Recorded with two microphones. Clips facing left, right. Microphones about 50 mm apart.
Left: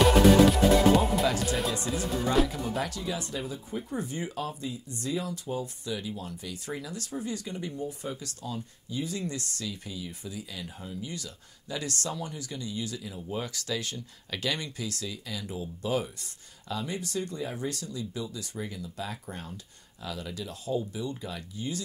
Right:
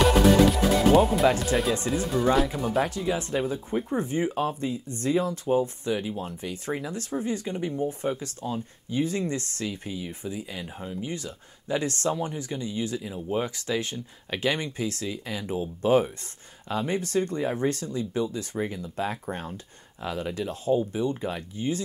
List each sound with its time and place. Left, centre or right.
0.0 s music: centre
1.5 s speech: right
2.3 s speech: centre
2.9 s speech: right